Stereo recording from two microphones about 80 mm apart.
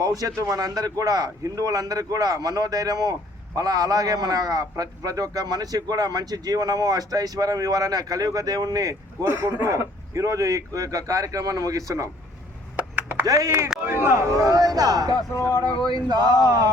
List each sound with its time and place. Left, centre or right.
0.0 s a man's voice: right
9.3 s a man's voice: right
9.6 s a man's voice: right
12.7 s chop: centre
13.2 s a man's voice: right
13.8 s a man's voice: right
15.3 s speech: left
15.9 s a man's voice: right